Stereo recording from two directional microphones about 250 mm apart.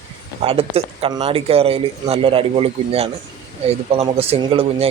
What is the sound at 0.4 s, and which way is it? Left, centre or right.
A man's voice, right.